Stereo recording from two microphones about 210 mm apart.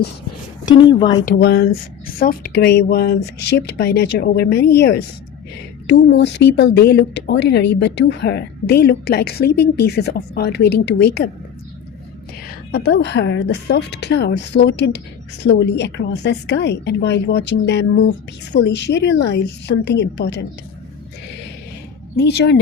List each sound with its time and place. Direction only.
0.6 s a woman's voice: 20° left (ahead or behind)
1.2 s speech: 45° left (ahead or behind)
12.7 s a woman's voice: 55° left (ahead or behind)
22.1 s speech: 50° left (ahead or behind)